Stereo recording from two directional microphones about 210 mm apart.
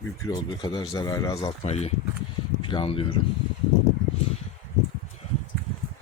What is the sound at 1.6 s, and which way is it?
Speech, 30° left (ahead or behind).